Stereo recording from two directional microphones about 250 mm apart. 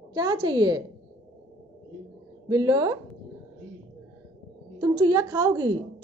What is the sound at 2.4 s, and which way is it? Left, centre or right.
Speech, centre.